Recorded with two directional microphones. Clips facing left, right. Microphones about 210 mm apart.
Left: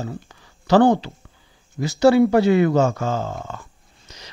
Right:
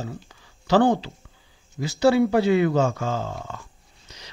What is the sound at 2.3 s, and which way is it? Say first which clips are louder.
Speech: left 3 dB; 45° left (ahead or behind).